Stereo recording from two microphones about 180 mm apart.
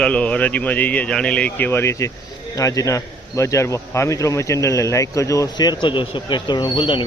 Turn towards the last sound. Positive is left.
turn(degrees=25)  # may be behind; listen again after turning